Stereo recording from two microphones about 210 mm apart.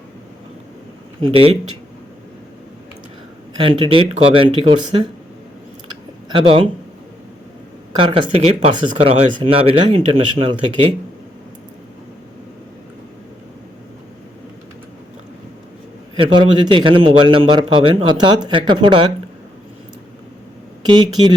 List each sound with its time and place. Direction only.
1.3 s speech: 25° right (ahead or behind)
3.6 s speech: 25° right (ahead or behind)
6.2 s speech: 25° right (ahead or behind)
7.9 s speech: 25° right (ahead or behind)
16.1 s speech: 25° right (ahead or behind)
20.8 s speech: 20° right (ahead or behind)